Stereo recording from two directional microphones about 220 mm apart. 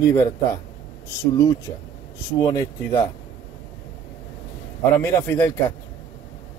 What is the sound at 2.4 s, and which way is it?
Speech, 15° left (ahead or behind).